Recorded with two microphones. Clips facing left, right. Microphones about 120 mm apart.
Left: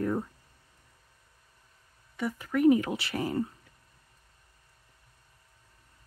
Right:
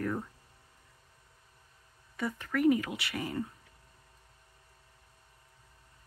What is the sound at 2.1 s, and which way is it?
Speech, 5° left (ahead or behind).